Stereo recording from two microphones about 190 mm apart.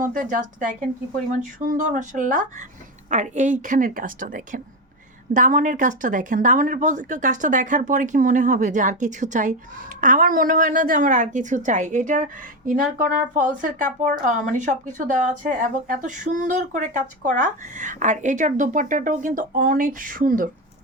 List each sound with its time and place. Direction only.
0.0 s speech: 45° right (ahead or behind)